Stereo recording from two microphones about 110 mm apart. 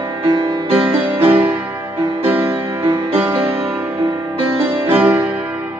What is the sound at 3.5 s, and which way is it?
Music, 20° right (ahead or behind).